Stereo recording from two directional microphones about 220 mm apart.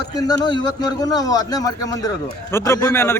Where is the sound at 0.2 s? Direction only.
15° left (ahead or behind).